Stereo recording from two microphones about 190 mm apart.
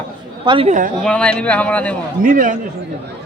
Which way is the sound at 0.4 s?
25° right (ahead or behind).